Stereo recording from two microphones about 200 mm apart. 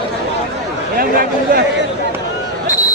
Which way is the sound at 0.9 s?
45° right (ahead or behind).